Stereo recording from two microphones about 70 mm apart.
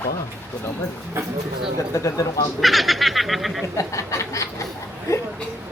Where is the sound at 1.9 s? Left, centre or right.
Left.